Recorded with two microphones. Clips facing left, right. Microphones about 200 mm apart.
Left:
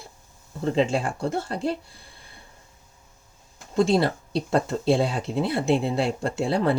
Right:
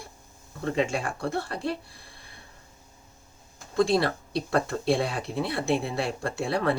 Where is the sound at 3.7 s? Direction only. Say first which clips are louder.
Left 2 dB; 25° left (ahead or behind).